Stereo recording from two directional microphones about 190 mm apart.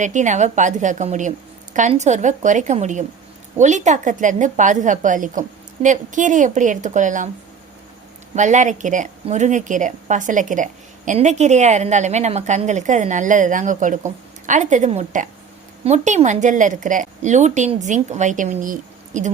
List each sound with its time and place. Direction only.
0.0 s a woman's voice: 40° right (ahead or behind)
8.4 s a woman's voice: 40° right (ahead or behind)